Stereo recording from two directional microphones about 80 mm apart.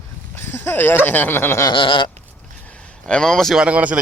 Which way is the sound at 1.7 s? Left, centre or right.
Left.